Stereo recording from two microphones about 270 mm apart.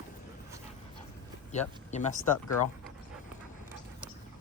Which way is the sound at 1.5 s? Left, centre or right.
Left.